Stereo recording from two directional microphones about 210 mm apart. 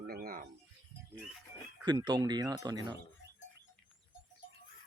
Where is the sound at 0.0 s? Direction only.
45° right (ahead or behind).